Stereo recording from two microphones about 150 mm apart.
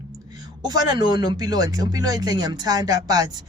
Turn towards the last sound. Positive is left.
turn(degrees=-25)  # may be behind; listen again after turning